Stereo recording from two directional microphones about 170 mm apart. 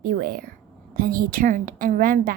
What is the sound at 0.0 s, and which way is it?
A child's voice, 60° right (ahead or behind).